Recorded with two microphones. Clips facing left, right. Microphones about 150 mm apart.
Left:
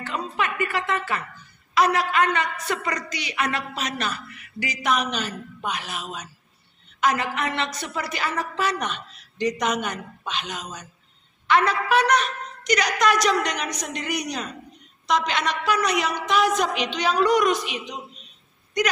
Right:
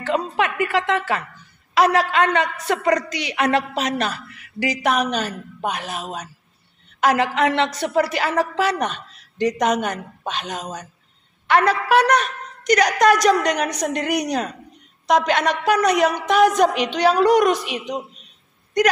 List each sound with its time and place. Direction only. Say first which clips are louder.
0.0 s music: right 6 dB; 85° right
2.0 s a woman's voice: right 4 dB; 90° right; by 4.9 s 75° right (ahead or behind)
4.9 s a woman's voice: right 4 dB; 45° right (ahead or behind)
7.0 s a woman's voice: right 6 dB; 85° right
8.7 s a woman's voice: right 5 dB; 45° right (ahead or behind)
11.4 s a woman's voice: right 3 dB; 60° right (ahead or behind)
12.2 s a woman's voice: right 2 dB; 50° right (ahead or behind)